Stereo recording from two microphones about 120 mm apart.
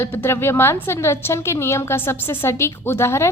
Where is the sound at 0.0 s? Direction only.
20° left (ahead or behind).